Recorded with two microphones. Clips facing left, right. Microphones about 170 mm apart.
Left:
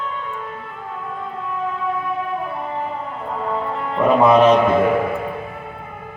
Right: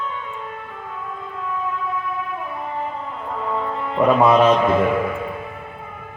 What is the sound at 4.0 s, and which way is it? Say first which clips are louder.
Music: even; 15° right (ahead or behind).